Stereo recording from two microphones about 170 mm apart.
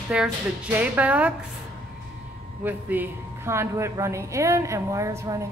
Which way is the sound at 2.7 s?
10° right (ahead or behind).